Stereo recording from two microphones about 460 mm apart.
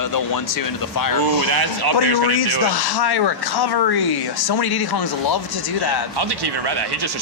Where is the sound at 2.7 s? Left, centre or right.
Left.